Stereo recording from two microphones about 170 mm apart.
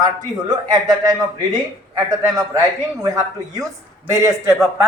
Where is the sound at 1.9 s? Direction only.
20° right (ahead or behind).